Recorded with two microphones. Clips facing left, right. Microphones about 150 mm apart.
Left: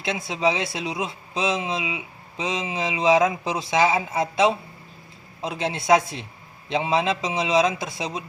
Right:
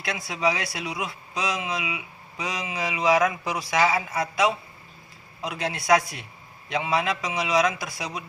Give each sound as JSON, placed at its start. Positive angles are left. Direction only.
{"t": 0.0, "sound": "speech", "side_deg": 25}